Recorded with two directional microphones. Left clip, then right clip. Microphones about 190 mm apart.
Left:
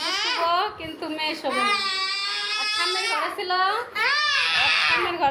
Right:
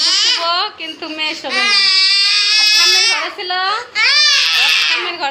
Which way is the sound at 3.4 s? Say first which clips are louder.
Right 5 dB; 10° right (ahead or behind).